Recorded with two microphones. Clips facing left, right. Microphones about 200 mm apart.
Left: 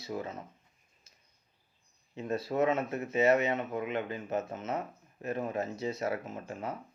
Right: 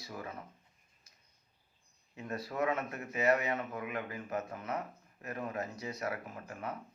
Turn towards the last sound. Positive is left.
turn(degrees=25)  # may be behind; listen again after turning